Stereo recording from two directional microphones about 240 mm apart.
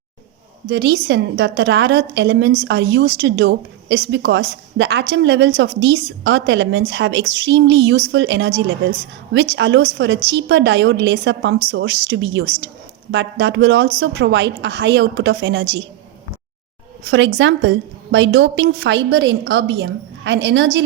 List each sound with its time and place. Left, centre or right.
0.7 s a woman's voice: right
17.1 s a woman's voice: right